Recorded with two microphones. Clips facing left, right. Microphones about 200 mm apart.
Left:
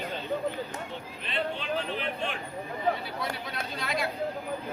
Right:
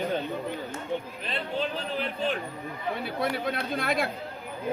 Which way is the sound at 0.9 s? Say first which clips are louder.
Right 9 dB; 50° right (ahead or behind).